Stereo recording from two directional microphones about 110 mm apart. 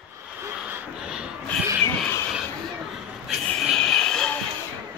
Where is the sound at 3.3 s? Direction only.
Centre (ahead or behind).